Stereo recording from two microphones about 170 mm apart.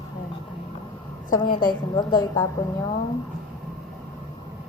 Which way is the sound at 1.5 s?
25° left (ahead or behind).